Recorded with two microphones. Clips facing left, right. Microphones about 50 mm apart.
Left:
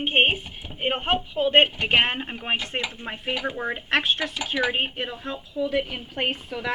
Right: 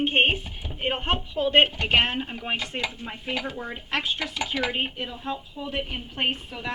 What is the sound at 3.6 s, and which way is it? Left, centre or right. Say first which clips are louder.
Speech: left 5 dB; left.